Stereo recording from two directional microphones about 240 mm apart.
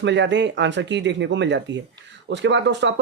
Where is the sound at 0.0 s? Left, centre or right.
Right.